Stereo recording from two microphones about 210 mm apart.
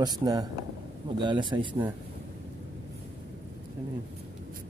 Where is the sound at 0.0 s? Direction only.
20° right (ahead or behind).